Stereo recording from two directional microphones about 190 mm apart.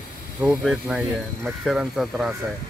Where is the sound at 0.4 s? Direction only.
Centre (ahead or behind).